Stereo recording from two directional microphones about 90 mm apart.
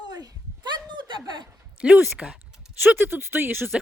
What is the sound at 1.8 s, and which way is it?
Speech, 10° right (ahead or behind).